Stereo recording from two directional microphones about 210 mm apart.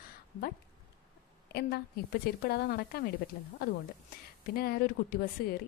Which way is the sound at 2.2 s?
45° left (ahead or behind).